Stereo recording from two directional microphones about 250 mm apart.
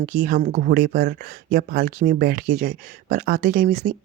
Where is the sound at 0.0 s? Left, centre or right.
Right.